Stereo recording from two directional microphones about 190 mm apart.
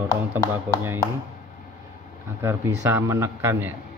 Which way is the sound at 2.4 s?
15° right (ahead or behind).